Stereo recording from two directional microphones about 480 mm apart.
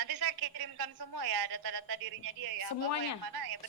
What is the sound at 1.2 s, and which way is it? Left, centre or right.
Speech, right.